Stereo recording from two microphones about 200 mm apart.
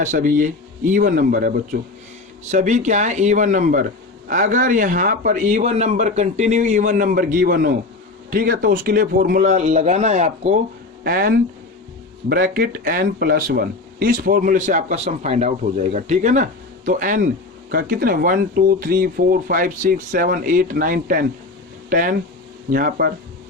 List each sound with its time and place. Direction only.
0.0 s speech: 40° right (ahead or behind)
11.0 s speech: 45° right (ahead or behind)